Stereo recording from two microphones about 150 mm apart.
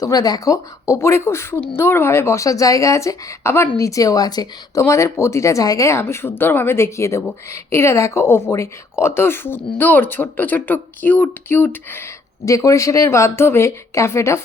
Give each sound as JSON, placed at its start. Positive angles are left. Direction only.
{"t": 0.0, "sound": "speech", "side_deg": 25}